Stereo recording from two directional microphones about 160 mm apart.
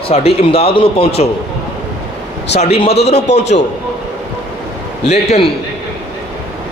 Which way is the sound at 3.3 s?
90° left.